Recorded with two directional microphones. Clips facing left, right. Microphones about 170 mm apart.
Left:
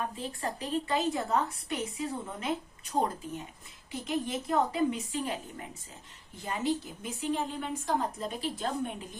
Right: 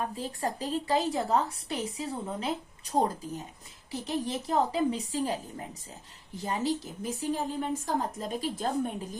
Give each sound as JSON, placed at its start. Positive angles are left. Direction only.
{"t": 0.2, "sound": "a woman's voice", "side_deg": -40}